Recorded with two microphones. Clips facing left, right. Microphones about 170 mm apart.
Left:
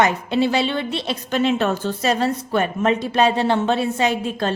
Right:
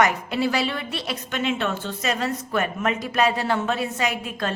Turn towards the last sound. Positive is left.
turn(degrees=30)  # may be behind; listen again after turning